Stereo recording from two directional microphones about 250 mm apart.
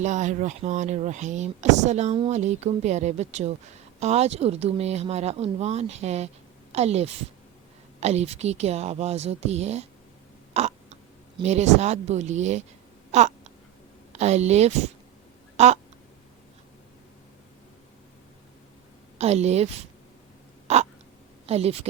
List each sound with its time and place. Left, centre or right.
0.0 s speech: right
10.5 s a sound: right
11.3 s speech: right
13.1 s a sound: right
14.1 s a woman's voice: right
15.5 s quack: right
19.2 s speech: right
20.7 s crow: right
21.4 s speech: right